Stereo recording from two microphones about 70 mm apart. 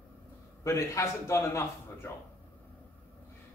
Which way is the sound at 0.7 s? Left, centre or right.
Left.